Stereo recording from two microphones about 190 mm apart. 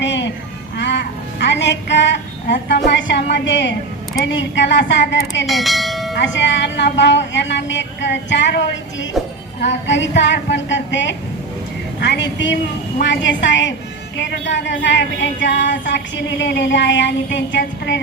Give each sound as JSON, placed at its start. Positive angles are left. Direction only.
{"t": 0.0, "sound": "music", "side_deg": 70}
{"t": 0.8, "sound": "child singing", "side_deg": 65}
{"t": 5.5, "sound": "bell", "side_deg": 0}
{"t": 6.1, "sound": "child singing", "side_deg": 70}
{"t": 11.9, "sound": "a woman's voice", "side_deg": 65}
{"t": 13.0, "sound": "child singing", "side_deg": 70}